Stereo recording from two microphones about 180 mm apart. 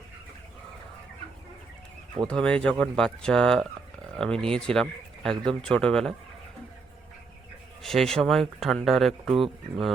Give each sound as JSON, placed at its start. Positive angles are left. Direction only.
{"t": 2.2, "sound": "speech", "side_deg": 5}
{"t": 7.8, "sound": "speech", "side_deg": 0}